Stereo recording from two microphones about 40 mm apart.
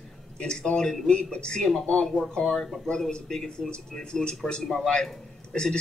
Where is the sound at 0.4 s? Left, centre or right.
Left.